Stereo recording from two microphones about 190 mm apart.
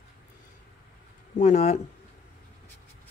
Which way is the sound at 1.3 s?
35° left (ahead or behind).